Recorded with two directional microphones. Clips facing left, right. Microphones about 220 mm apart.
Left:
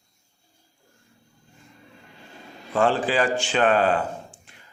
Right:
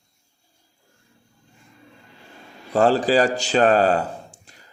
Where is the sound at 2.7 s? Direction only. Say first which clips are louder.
Right 4 dB; 40° right (ahead or behind).